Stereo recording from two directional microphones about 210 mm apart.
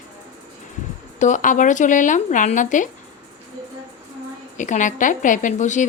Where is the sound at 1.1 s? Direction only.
35° left (ahead or behind).